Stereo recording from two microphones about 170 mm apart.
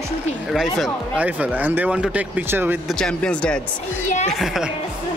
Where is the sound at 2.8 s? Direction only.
5° left (ahead or behind).